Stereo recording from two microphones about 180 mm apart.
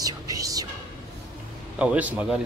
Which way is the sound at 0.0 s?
20° right (ahead or behind).